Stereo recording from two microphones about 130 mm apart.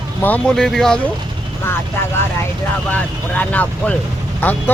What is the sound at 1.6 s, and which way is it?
Speech, 20° left (ahead or behind).